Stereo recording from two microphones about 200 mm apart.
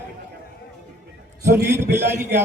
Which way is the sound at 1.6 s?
10° right (ahead or behind).